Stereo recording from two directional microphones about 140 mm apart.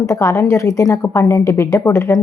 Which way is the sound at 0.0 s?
20° left (ahead or behind).